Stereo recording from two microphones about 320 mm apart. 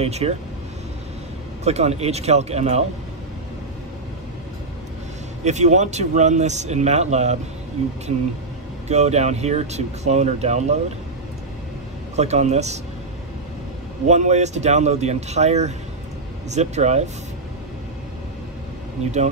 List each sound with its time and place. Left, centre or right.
0.0 s speech: centre
1.6 s speech: centre
5.4 s speech: right
8.8 s speech: right
12.2 s speech: right
14.0 s speech: right